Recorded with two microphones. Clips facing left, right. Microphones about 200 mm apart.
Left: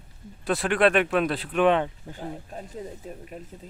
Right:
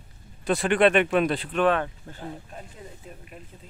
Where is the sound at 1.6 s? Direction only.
15° left (ahead or behind).